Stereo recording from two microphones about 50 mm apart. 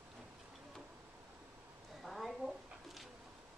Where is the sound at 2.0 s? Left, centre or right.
Centre.